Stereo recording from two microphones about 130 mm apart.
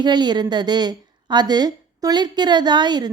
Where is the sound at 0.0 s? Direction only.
35° right (ahead or behind).